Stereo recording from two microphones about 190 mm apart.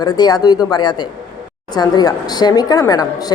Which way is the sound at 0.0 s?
20° left (ahead or behind).